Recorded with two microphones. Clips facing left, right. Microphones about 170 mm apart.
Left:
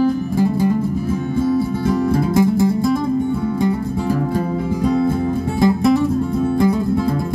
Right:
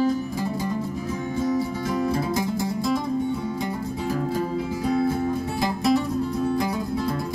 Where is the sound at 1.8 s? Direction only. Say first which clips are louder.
Left 7 dB; 60° left (ahead or behind).